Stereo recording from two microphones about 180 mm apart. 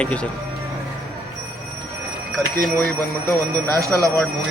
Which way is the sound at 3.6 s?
20° right (ahead or behind).